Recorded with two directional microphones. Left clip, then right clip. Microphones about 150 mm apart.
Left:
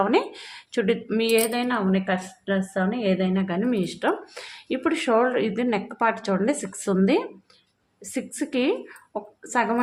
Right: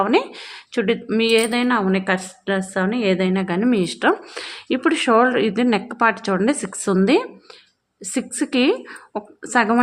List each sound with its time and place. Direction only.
0.0 s speech: 20° right (ahead or behind); by 9.7 s 40° right (ahead or behind)